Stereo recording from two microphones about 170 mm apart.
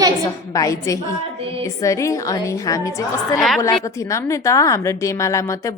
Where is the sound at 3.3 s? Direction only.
Centre (ahead or behind).